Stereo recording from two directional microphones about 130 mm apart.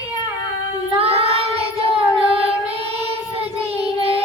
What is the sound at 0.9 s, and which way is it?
Child singing, 50° right (ahead or behind).